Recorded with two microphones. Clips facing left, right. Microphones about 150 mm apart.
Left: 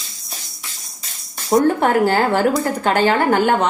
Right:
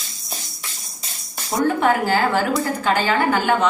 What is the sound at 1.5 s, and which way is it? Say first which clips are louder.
Speech: left 3 dB; 50° left (ahead or behind).